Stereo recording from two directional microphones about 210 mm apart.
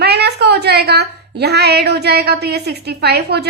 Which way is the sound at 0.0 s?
50° right (ahead or behind).